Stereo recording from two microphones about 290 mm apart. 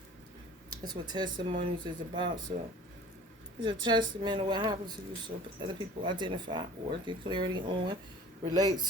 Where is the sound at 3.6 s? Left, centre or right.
Centre.